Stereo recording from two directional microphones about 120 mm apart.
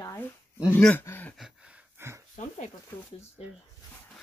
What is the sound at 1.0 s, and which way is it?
Speech, 15° left (ahead or behind).